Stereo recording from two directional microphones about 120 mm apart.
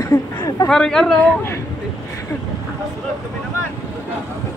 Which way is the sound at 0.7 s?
5° left (ahead or behind).